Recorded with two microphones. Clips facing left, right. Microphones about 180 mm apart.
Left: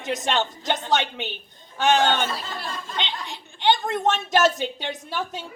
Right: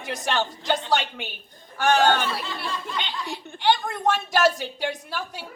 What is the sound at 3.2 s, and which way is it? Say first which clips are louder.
A woman's voice: even; 20° left (ahead or behind).